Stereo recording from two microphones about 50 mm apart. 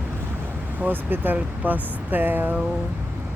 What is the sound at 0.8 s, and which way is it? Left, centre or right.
Speech, right.